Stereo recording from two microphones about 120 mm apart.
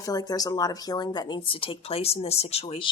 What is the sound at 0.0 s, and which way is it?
Speech, 30° left (ahead or behind).